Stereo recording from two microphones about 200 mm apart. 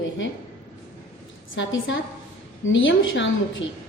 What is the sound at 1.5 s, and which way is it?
A woman's voice, 70° left (ahead or behind).